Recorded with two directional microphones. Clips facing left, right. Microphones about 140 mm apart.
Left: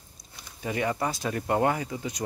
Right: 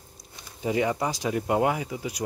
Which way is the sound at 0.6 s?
20° right (ahead or behind).